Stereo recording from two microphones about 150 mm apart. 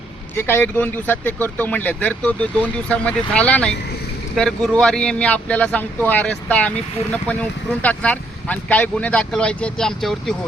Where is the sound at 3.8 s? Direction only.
90° left.